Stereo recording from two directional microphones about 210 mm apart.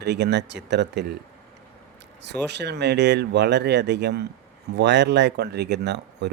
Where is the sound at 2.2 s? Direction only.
55° right (ahead or behind).